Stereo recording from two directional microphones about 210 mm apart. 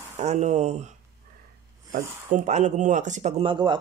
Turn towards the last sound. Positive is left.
turn(degrees=-20)  # may be behind; listen again after turning